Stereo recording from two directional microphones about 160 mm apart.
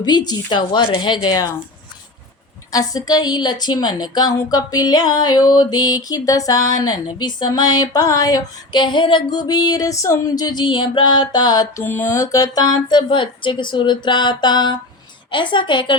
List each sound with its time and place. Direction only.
0.0 s a woman's voice: 25° left (ahead or behind)
2.7 s a woman's voice: 25° left (ahead or behind)
11.8 s a woman's voice: 15° left (ahead or behind); by 16.0 s 30° left (ahead or behind)